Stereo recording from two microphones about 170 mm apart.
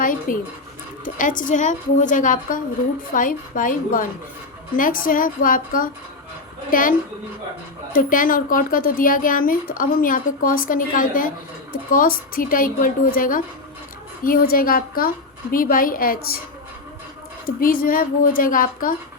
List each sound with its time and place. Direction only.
0.0 s a woman's voice: 55° left (ahead or behind)
7.9 s a woman's voice: 55° left (ahead or behind)
17.6 s a woman's voice: 55° left (ahead or behind)